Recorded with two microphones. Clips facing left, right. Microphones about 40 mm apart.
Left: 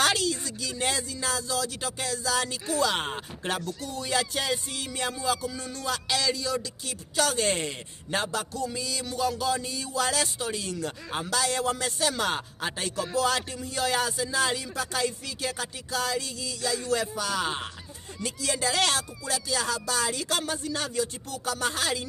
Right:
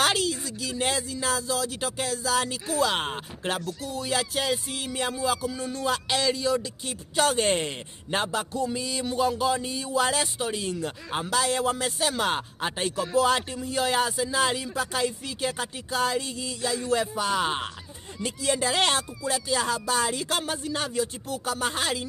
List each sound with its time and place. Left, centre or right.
0.0 s speech: centre